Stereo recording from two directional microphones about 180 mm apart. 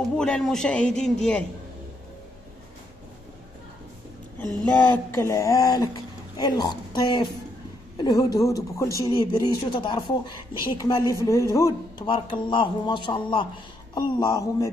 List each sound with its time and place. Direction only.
0.0 s a man's voice: 5° left (ahead or behind)
4.8 s speech: 10° left (ahead or behind)